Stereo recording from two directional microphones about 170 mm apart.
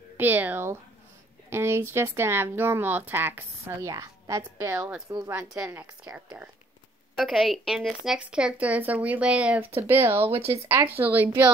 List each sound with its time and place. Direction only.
0.2 s speech: 10° right (ahead or behind)
7.2 s speech: centre (ahead or behind)
10.2 s speech: 35° right (ahead or behind)
10.5 s speech: 10° right (ahead or behind)